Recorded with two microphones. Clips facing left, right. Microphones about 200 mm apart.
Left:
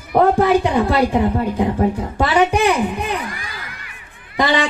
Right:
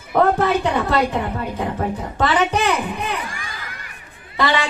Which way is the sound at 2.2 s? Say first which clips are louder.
Left 3 dB; 10° left (ahead or behind).